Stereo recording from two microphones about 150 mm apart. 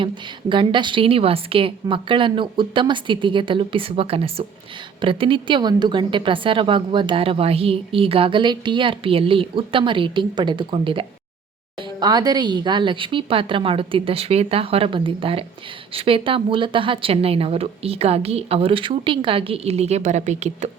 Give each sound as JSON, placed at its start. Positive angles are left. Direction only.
{"t": 0.0, "sound": "a woman's voice", "side_deg": -35}